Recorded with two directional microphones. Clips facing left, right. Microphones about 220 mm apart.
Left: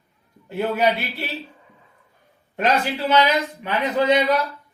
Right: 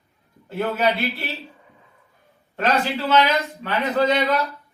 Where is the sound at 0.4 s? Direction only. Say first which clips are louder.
Left 1 dB; 15° left (ahead or behind).